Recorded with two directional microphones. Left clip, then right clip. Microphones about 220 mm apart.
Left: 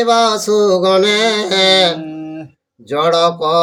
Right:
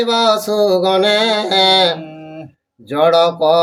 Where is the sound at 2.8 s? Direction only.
Centre (ahead or behind).